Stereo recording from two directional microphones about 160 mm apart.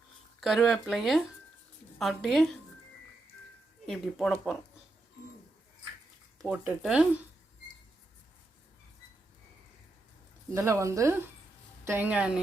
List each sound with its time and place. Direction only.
0.3 s speech: centre (ahead or behind)
3.8 s speech: centre (ahead or behind)
6.4 s speech: 10° right (ahead or behind)
10.5 s speech: 20° right (ahead or behind)